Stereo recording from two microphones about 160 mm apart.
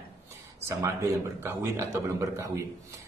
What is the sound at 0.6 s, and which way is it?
Speech, 15° right (ahead or behind).